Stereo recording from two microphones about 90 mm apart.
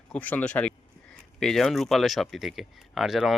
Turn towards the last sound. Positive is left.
turn(degrees=-5)  # may be behind; listen again after turning